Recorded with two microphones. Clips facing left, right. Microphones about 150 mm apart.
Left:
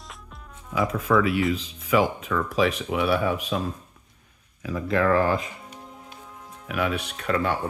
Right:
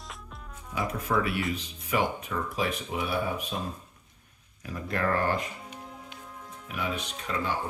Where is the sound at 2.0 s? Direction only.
90° left.